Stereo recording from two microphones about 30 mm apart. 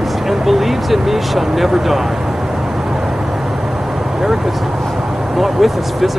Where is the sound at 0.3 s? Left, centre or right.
Centre.